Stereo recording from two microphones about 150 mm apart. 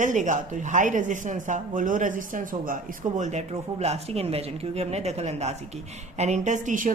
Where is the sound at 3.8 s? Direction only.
45° right (ahead or behind); by 6.9 s 60° right (ahead or behind).